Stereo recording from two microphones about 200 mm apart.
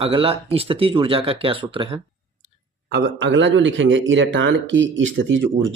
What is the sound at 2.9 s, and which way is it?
Speech, 65° right (ahead or behind).